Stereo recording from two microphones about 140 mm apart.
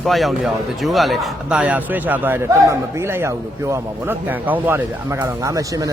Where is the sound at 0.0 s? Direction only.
Centre (ahead or behind).